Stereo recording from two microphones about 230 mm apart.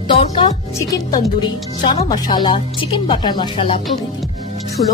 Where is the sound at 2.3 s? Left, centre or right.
Left.